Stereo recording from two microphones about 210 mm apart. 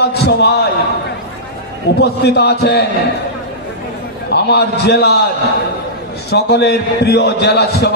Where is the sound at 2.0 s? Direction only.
50° left (ahead or behind).